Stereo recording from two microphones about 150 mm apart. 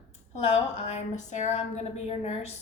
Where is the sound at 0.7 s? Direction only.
50° left (ahead or behind).